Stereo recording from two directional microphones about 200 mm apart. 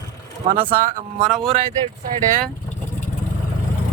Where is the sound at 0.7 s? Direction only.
45° right (ahead or behind).